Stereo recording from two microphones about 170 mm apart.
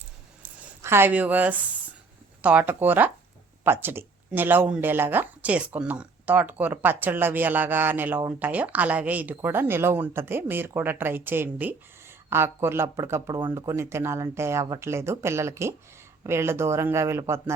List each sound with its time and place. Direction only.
0.8 s speech: 15° right (ahead or behind)